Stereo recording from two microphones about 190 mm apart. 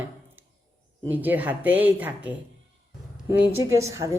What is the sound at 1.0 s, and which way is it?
A man's voice, 10° right (ahead or behind).